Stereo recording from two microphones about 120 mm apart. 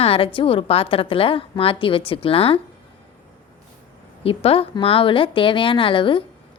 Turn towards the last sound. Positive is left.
turn(degrees=45)  # may be behind; listen again after turning